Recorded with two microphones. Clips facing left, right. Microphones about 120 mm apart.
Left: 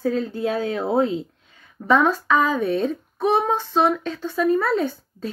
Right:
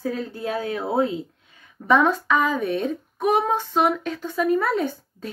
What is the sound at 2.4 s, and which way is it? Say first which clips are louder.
Speech: left 2 dB; 30° left (ahead or behind).